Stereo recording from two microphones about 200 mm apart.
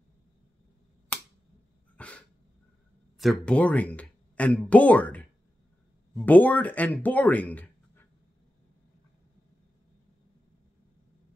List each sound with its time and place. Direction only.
2.0 s dog: 5° left (ahead or behind)
3.2 s speech: 5° left (ahead or behind)